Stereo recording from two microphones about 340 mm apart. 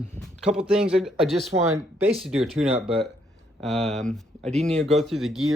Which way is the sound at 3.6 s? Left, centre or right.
Centre.